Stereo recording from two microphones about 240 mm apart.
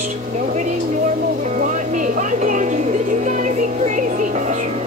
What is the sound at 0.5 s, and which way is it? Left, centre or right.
Music, right.